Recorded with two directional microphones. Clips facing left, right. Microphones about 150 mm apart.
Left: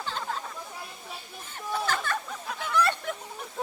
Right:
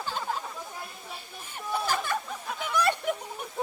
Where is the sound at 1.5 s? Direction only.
10° right (ahead or behind).